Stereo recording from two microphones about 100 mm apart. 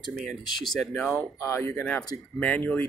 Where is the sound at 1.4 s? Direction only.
25° left (ahead or behind).